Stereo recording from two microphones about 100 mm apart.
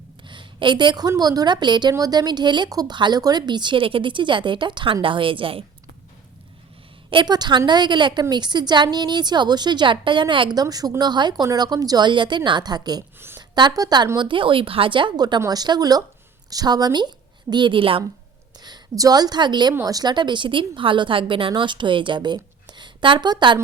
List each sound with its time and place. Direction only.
0.3 s a woman's voice: 55° right (ahead or behind)
7.1 s a woman's voice: 50° right (ahead or behind)
13.1 s a sound: 25° right (ahead or behind)
13.6 s a woman's voice: 40° right (ahead or behind)
14.2 s speech: 55° right (ahead or behind)
18.6 s a woman's voice: 40° right (ahead or behind)